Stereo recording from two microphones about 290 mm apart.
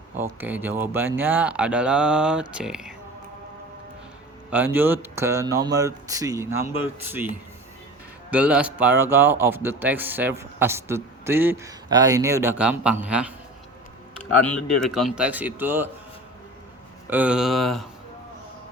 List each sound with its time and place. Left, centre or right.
0.2 s speech: centre
4.5 s a man's voice: centre
8.3 s a man's voice: centre
14.4 s speech: centre
17.1 s speech: centre